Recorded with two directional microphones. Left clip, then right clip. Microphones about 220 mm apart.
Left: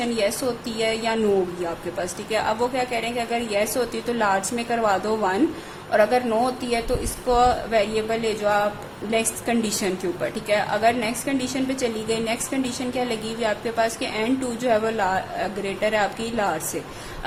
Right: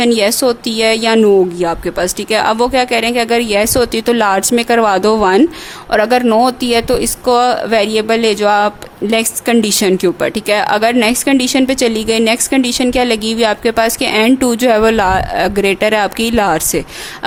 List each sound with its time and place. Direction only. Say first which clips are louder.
0.0 s speech: right 12 dB; 45° right (ahead or behind)